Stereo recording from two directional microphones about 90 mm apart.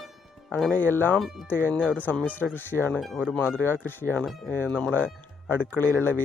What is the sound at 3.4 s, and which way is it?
Speech, 25° left (ahead or behind).